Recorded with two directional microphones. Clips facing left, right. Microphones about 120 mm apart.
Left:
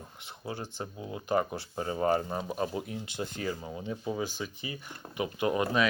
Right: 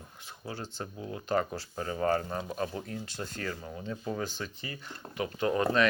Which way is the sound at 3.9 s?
5° left (ahead or behind).